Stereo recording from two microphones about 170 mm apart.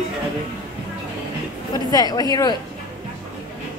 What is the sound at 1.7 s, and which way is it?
Speech, 20° left (ahead or behind).